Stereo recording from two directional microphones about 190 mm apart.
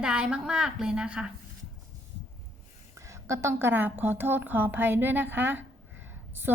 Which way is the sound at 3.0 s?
15° right (ahead or behind).